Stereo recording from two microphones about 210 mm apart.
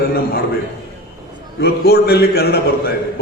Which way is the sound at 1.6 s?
45° left (ahead or behind).